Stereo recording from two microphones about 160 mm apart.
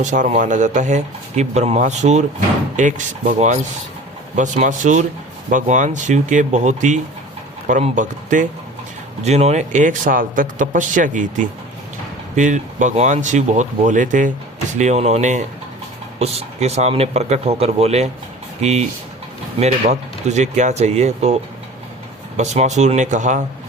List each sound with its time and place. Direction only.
0.0 s speech: 50° right (ahead or behind)
22.4 s speech: 45° right (ahead or behind)